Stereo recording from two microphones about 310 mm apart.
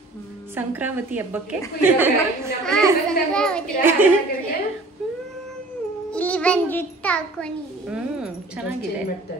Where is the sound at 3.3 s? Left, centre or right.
Centre.